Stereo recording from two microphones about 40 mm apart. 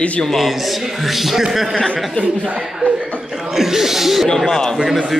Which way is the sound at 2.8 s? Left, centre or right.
Right.